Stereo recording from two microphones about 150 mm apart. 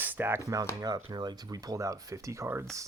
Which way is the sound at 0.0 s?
15° right (ahead or behind).